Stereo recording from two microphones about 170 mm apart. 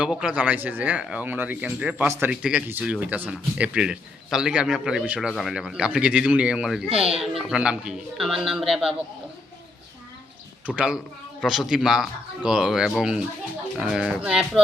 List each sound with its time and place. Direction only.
0.0 s speech: 5° right (ahead or behind)
6.8 s speech: 35° right (ahead or behind)
7.5 s speech: 5° right (ahead or behind)
10.7 s speech: 5° right (ahead or behind)